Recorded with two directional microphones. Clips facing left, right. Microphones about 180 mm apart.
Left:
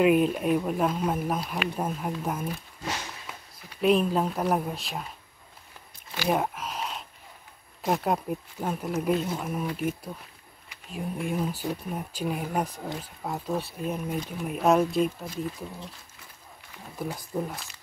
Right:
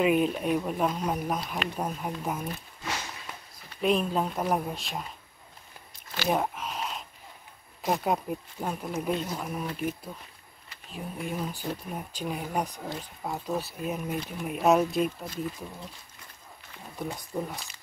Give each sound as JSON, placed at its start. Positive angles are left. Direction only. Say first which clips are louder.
{"t": 0.0, "sound": "speech", "louder": "left 3 dB", "side_deg": 0}
{"t": 3.8, "sound": "speech", "louder": "left 3 dB", "side_deg": 0}
{"t": 6.1, "sound": "a sound", "louder": "left 1 dB", "side_deg": 5}
{"t": 7.8, "sound": "speech", "louder": "left 1 dB", "side_deg": 0}
{"t": 17.0, "sound": "speech", "louder": "left 2 dB", "side_deg": 5}